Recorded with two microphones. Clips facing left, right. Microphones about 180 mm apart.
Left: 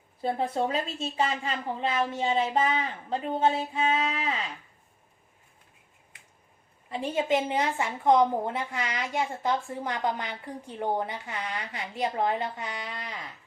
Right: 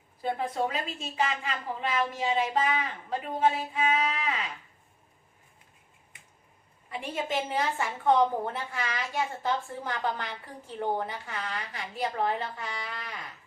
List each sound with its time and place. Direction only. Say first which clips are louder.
0.2 s a woman's voice: left 2 dB; 30° left (ahead or behind)
6.9 s a woman's voice: left 5 dB; 25° left (ahead or behind)